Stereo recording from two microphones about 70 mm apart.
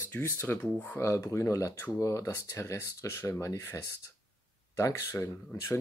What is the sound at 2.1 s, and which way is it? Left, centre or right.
Speech, left.